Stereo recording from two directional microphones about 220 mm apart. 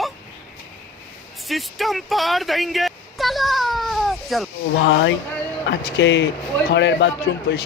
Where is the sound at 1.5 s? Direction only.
Centre (ahead or behind).